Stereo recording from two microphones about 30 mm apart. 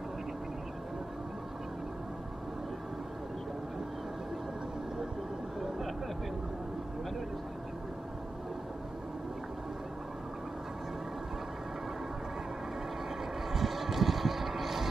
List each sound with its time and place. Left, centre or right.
13.5 s vehicle: centre